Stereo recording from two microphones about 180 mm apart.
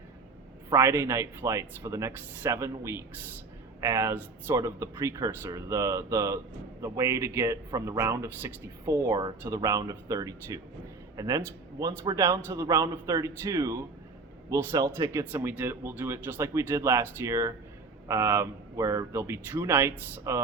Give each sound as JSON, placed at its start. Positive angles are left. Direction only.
{"t": 0.7, "sound": "speech", "side_deg": -15}